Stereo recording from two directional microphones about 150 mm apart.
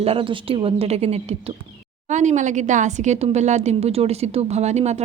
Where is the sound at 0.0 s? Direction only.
40° right (ahead or behind).